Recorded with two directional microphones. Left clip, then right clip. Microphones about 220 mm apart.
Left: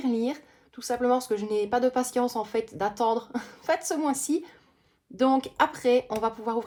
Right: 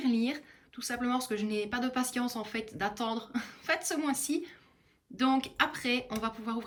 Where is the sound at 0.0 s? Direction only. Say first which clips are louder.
Left 4 dB; 10° left (ahead or behind).